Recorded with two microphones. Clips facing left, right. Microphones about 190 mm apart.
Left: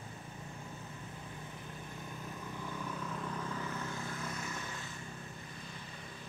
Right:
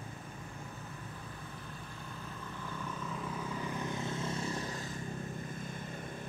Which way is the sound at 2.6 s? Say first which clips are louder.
Even; 10° left (ahead or behind).